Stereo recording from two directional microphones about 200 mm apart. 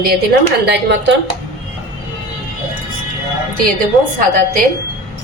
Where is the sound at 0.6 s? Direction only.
55° right (ahead or behind).